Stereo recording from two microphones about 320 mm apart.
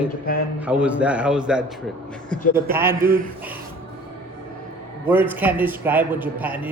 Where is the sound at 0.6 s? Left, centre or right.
Centre.